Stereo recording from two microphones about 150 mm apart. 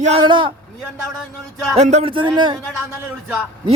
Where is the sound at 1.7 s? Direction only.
50° right (ahead or behind).